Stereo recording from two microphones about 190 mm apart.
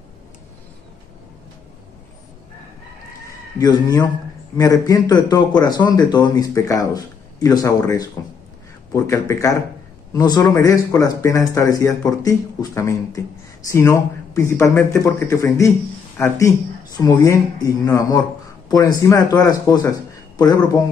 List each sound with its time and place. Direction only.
3.5 s a man's voice: 20° left (ahead or behind)